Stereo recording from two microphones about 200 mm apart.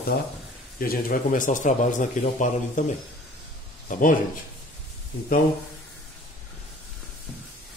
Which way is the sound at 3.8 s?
40° left (ahead or behind).